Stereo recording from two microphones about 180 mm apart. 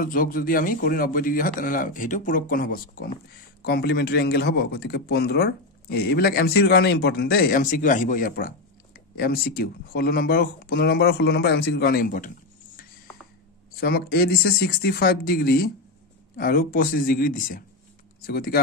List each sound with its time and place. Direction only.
0.0 s a man's voice: 50° left (ahead or behind)
13.7 s a man's voice: 60° left (ahead or behind)